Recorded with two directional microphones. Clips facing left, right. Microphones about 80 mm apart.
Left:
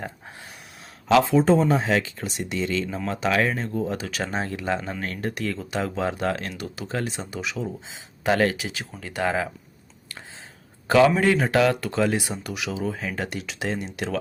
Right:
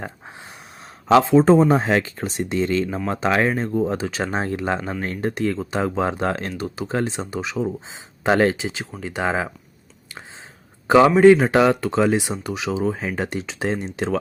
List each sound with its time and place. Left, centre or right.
1.0 s speech: right
10.8 s speech: right